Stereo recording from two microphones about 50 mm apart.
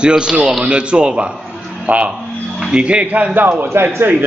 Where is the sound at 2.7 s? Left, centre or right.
Right.